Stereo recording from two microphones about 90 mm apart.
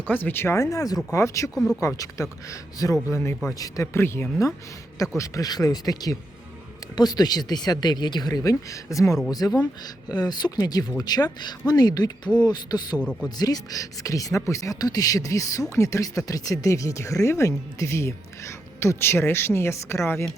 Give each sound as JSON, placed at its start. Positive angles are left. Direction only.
{"t": 0.1, "sound": "speech", "side_deg": 20}
{"t": 9.6, "sound": "speech", "side_deg": 50}
{"t": 13.0, "sound": "speech", "side_deg": 10}
{"t": 13.4, "sound": "speech", "side_deg": 45}